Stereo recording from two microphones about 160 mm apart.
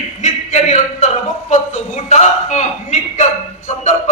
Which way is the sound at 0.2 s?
45° left (ahead or behind).